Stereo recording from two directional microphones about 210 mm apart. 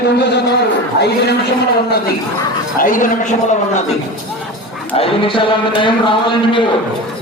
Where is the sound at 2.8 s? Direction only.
40° left (ahead or behind).